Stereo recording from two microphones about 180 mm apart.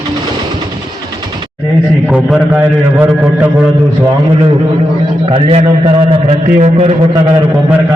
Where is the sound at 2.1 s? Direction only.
5° right (ahead or behind).